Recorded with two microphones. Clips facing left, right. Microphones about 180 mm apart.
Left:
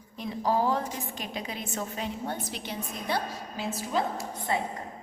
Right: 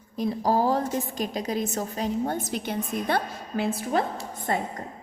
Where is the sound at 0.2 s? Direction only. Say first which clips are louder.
Right 4 dB; 40° right (ahead or behind); by 4.6 s 55° right (ahead or behind).